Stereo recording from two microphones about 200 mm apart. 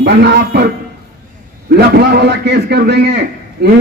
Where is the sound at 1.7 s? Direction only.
55° right (ahead or behind).